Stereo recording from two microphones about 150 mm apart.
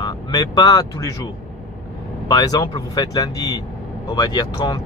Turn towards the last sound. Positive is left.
turn(degrees=25)  # may be behind; listen again after turning